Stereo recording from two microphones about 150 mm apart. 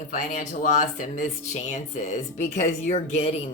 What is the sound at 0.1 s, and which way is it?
Speech, 60° left (ahead or behind).